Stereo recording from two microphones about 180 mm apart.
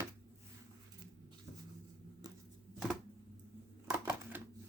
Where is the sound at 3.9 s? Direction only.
10° right (ahead or behind).